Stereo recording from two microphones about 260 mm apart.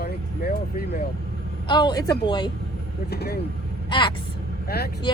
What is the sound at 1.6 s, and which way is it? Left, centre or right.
Speech, centre.